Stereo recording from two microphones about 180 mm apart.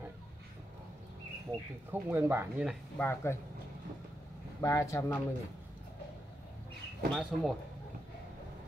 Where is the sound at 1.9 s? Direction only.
10° right (ahead or behind).